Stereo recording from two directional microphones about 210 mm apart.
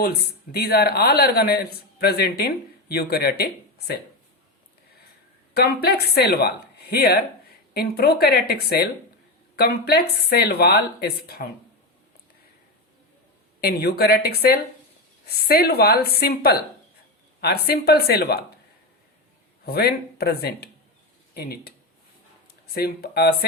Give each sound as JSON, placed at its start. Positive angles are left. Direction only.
{"t": 0.0, "sound": "speech", "side_deg": 50}
{"t": 5.5, "sound": "speech", "side_deg": 50}
{"t": 13.6, "sound": "speech", "side_deg": 50}
{"t": 19.6, "sound": "speech", "side_deg": 50}
{"t": 22.7, "sound": "speech", "side_deg": 45}